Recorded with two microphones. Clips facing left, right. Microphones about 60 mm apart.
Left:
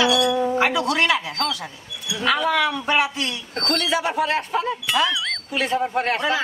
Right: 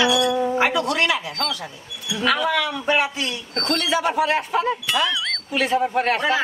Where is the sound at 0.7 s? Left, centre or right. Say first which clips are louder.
Left 1 dB; centre.